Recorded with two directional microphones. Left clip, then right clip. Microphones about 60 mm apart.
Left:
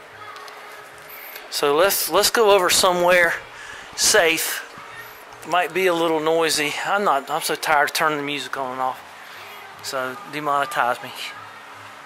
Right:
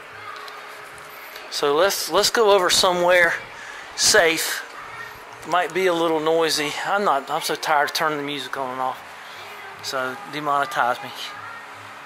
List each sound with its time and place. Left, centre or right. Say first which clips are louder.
1.5 s speech: left 1 dB; left
8.3 s speech: left 1 dB; left
9.9 s speech: even; left